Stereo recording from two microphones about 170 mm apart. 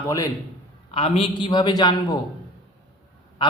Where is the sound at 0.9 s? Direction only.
30° left (ahead or behind).